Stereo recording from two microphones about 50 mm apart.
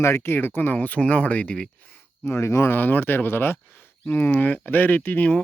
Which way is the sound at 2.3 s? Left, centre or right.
Left.